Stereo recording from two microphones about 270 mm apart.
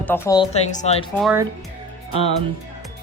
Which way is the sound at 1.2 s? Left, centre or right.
Centre.